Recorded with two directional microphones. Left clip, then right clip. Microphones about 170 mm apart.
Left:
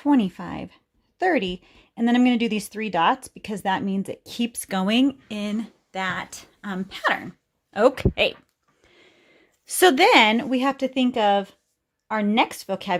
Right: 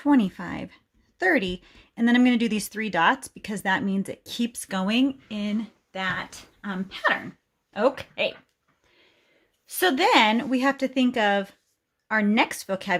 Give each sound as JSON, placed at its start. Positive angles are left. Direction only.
{"t": 0.0, "sound": "a woman's voice", "side_deg": 20}
{"t": 5.4, "sound": "speech", "side_deg": 60}
{"t": 7.7, "sound": "speech", "side_deg": 50}
{"t": 9.6, "sound": "a woman's voice", "side_deg": 50}